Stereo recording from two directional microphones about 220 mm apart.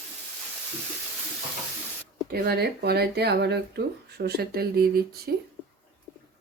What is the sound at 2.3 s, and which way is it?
Speech, 45° right (ahead or behind).